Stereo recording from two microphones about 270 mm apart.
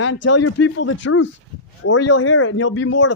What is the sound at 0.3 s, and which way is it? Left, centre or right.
Speech, left.